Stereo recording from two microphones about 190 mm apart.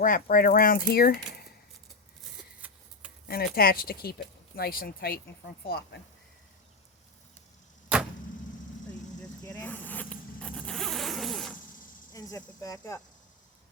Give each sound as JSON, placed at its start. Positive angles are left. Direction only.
{"t": 0.0, "sound": "speech", "side_deg": 45}
{"t": 2.6, "sound": "a sound", "side_deg": -10}
{"t": 3.2, "sound": "speech", "side_deg": 55}
{"t": 9.4, "sound": "zipper", "side_deg": 10}
{"t": 12.1, "sound": "speech", "side_deg": 15}